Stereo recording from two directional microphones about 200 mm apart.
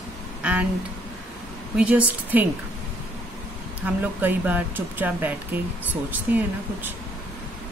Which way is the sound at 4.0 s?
10° right (ahead or behind).